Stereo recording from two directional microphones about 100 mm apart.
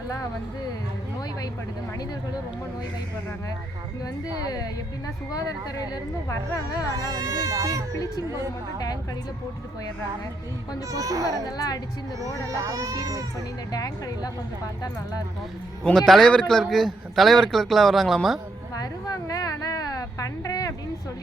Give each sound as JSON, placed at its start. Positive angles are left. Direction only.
{"t": 5.3, "sound": "speech", "side_deg": 35}
{"t": 7.1, "sound": "speech", "side_deg": -35}
{"t": 10.9, "sound": "speech", "side_deg": -35}
{"t": 11.4, "sound": "speech", "side_deg": 40}
{"t": 12.2, "sound": "speech", "side_deg": -35}
{"t": 13.7, "sound": "speech", "side_deg": 40}
{"t": 15.8, "sound": "a man's voice", "side_deg": 5}
{"t": 18.7, "sound": "a sound", "side_deg": 35}